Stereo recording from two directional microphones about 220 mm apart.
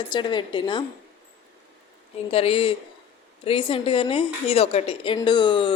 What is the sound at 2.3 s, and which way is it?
Speech, 25° left (ahead or behind).